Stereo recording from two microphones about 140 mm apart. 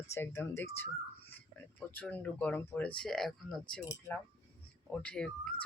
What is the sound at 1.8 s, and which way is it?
Speech, 10° left (ahead or behind).